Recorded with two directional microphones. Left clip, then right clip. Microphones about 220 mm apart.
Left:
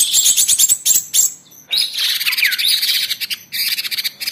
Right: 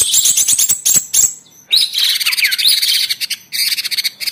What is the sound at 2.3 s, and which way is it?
Bird, 15° right (ahead or behind).